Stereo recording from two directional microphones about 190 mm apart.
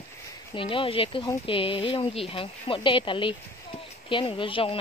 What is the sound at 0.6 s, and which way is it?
Speech, 25° left (ahead or behind).